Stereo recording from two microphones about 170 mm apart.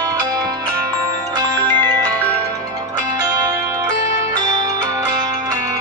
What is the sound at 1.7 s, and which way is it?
Music, 10° left (ahead or behind).